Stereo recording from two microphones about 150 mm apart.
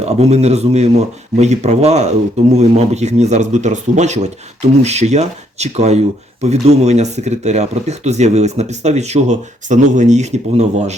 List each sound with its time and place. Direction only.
0.0 s speech: 45° right (ahead or behind)